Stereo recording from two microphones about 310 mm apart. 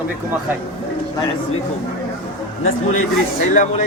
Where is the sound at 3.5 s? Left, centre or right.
Left.